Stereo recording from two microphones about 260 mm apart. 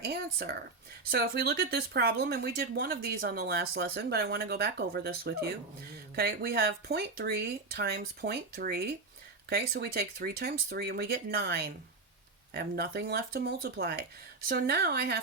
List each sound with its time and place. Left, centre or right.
0.0 s speech: right